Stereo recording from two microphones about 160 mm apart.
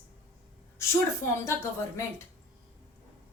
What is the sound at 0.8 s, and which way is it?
Speech, 15° left (ahead or behind).